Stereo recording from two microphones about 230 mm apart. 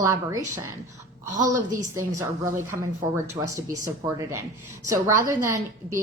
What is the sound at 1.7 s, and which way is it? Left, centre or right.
Speech, right.